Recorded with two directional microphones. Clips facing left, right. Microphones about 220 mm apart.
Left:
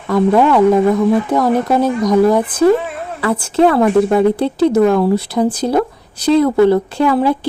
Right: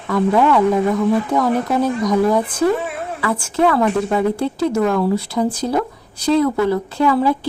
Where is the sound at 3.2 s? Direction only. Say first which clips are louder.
Left 5 dB; 35° left (ahead or behind).